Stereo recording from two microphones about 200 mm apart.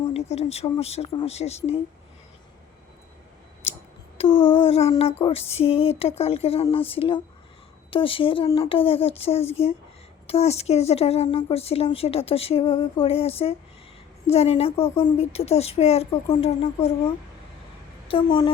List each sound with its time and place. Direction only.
0.1 s a woman's voice: 30° left (ahead or behind)
4.3 s a sound: 10° left (ahead or behind)
4.6 s a woman's voice: 30° left (ahead or behind)
18.1 s speech: 25° left (ahead or behind)